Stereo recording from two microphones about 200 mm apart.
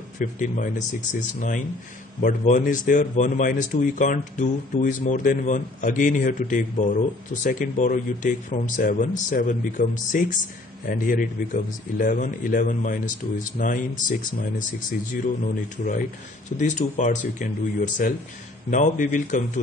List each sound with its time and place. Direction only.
0.2 s a man's voice: 40° left (ahead or behind)
2.2 s a man's voice: 40° left (ahead or behind)
15.2 s a man's voice: 40° left (ahead or behind)